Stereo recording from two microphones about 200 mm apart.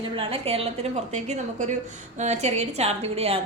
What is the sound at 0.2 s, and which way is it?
A woman's voice, 30° right (ahead or behind).